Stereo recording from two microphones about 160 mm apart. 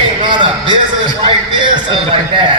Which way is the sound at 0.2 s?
30° right (ahead or behind).